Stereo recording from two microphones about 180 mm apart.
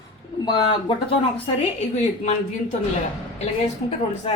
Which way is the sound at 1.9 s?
40° left (ahead or behind).